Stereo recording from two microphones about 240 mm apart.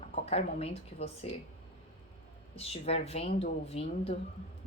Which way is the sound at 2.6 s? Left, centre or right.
Left.